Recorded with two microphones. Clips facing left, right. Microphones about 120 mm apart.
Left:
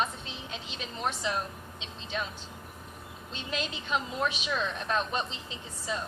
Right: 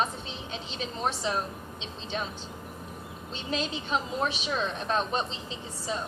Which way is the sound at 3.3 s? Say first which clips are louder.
Right 4 dB; 30° right (ahead or behind).